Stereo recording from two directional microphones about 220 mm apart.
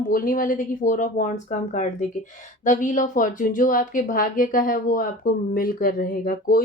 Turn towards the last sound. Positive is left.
turn(degrees=40)  # may be behind; listen again after turning